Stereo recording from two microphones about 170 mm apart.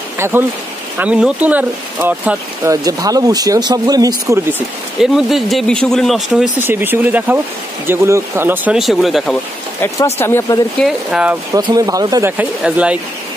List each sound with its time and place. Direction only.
0.2 s speech: 10° right (ahead or behind)
5.0 s speech: centre (ahead or behind)
10.1 s speech: 15° left (ahead or behind)
10.8 s speech: 5° right (ahead or behind)
11.5 s speech: 20° right (ahead or behind)
12.3 s speech: 10° right (ahead or behind)